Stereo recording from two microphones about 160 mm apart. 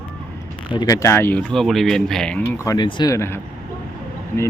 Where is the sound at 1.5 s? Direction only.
Centre (ahead or behind); by 3.4 s 15° left (ahead or behind).